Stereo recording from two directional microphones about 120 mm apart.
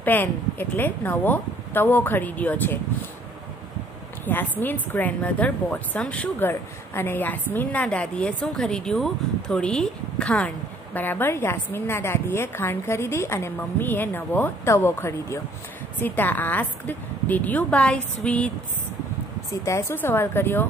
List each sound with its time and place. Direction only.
0.0 s a woman's voice: 15° left (ahead or behind)
4.3 s a woman's voice: 15° left (ahead or behind)
19.6 s a woman's voice: 25° left (ahead or behind)